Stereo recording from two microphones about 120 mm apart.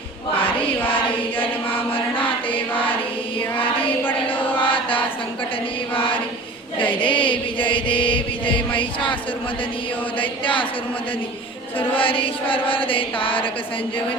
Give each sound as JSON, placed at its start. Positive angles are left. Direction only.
{"t": 0.3, "sound": "a sound", "side_deg": 50}
{"t": 0.9, "sound": "choir", "side_deg": 50}
{"t": 1.9, "sound": "chant", "side_deg": 45}
{"t": 4.5, "sound": "chant", "side_deg": 45}
{"t": 10.2, "sound": "chant", "side_deg": 45}
{"t": 11.8, "sound": "chant", "side_deg": 45}